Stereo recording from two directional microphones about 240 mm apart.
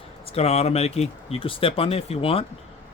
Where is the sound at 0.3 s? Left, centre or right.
Left.